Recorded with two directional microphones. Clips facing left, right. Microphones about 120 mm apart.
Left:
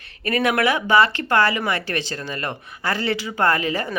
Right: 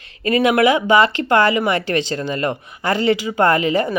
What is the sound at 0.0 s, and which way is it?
Speech, 20° right (ahead or behind).